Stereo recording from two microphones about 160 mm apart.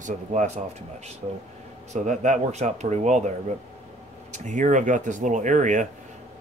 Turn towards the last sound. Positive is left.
turn(degrees=-50)  # may be behind; listen again after turning